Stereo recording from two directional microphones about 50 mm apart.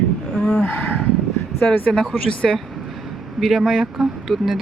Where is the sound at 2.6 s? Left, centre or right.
Centre.